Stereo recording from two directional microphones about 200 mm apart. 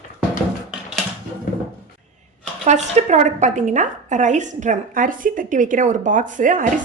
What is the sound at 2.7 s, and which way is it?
A woman's voice, 35° right (ahead or behind).